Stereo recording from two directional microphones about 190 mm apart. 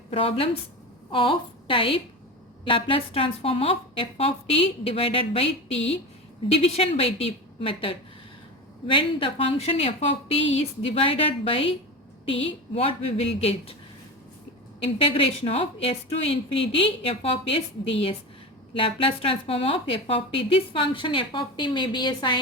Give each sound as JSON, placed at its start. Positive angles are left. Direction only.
{"t": 0.1, "sound": "speech", "side_deg": 30}
{"t": 14.9, "sound": "speech", "side_deg": 30}